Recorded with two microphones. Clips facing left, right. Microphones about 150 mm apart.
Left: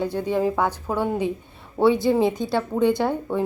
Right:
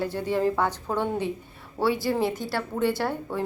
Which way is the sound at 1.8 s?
20° left (ahead or behind).